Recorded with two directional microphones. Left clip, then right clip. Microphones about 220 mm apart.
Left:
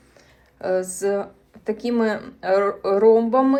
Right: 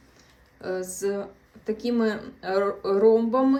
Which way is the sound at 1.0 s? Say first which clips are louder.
Left 6 dB; 15° right (ahead or behind).